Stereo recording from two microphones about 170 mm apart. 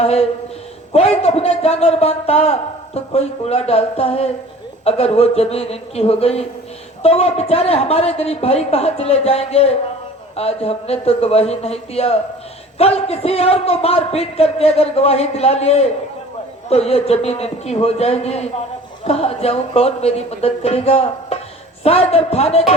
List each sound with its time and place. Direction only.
0.0 s a man's voice: 35° left (ahead or behind)